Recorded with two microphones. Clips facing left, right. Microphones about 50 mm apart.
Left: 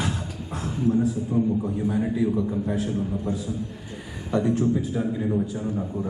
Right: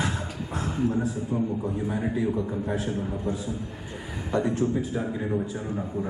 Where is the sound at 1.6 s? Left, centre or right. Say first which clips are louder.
Left 3 dB; centre.